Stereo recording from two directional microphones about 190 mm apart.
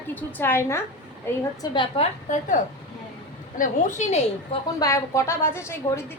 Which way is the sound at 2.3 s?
40° left (ahead or behind).